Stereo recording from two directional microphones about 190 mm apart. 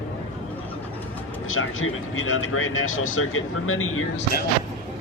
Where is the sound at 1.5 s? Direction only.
90° left.